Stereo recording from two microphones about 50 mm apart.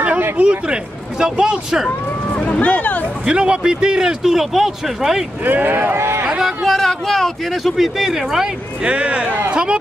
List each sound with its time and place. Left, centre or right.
0.4 s speech: right
1.9 s speech: left
3.3 s speech: centre
5.4 s speech: right
5.9 s speech: right
6.4 s speech: centre
7.7 s speech: centre
8.8 s speech: right